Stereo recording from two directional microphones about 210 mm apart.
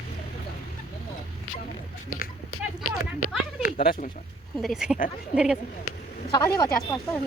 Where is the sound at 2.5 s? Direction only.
90° left.